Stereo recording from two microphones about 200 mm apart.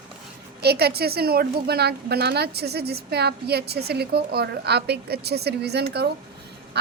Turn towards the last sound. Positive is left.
turn(degrees=-55)  # may be behind; listen again after turning